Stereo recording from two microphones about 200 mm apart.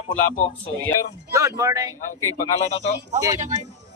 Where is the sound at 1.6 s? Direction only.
15° right (ahead or behind).